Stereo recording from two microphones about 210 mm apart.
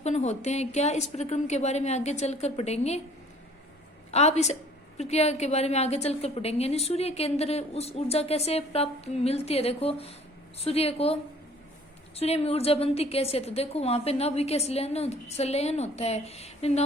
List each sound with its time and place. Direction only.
0.0 s a woman's voice: 30° left (ahead or behind)
4.1 s a woman's voice: 30° left (ahead or behind)